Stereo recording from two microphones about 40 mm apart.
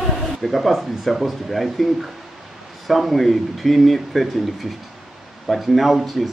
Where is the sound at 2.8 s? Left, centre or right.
Centre.